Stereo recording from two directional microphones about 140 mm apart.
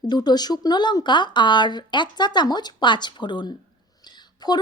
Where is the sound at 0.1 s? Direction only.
30° left (ahead or behind).